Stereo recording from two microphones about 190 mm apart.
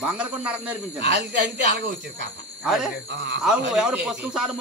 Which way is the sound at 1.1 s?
65° right (ahead or behind).